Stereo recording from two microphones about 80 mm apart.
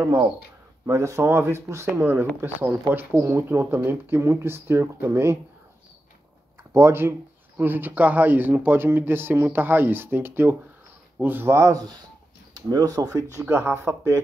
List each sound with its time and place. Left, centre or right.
0.0 s speech: right
6.7 s speech: right
12.5 s speech: right